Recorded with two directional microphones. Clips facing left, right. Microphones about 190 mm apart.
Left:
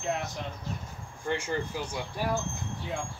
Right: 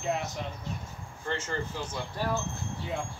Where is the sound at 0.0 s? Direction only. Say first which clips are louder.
Right 1 dB; centre (ahead or behind).